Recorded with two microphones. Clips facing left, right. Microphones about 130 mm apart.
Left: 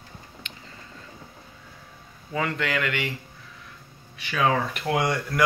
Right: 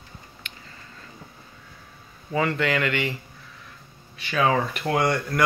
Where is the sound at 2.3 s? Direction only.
Centre (ahead or behind).